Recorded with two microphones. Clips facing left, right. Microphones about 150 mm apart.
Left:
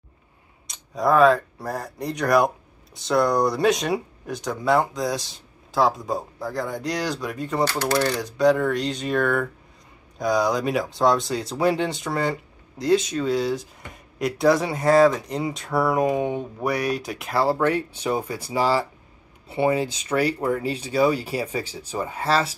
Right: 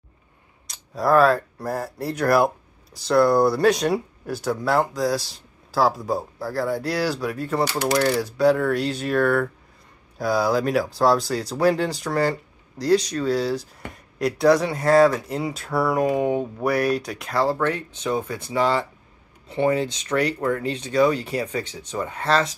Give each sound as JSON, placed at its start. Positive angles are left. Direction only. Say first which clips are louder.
{"t": 0.7, "sound": "speech", "louder": "even", "side_deg": 0}